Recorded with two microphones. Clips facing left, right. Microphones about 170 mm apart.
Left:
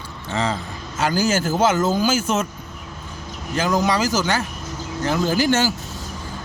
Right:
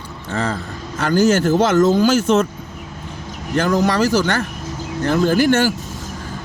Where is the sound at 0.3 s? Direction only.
55° right (ahead or behind).